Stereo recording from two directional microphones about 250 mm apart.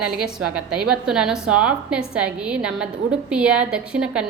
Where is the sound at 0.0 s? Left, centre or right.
Centre.